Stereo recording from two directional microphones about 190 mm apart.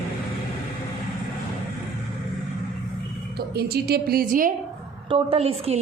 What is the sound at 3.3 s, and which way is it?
A woman's voice, 55° right (ahead or behind).